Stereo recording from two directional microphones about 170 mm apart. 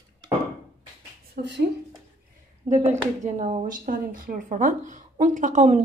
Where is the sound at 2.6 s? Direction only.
40° right (ahead or behind).